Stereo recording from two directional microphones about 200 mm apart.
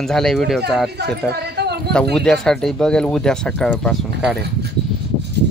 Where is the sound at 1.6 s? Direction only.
55° right (ahead or behind).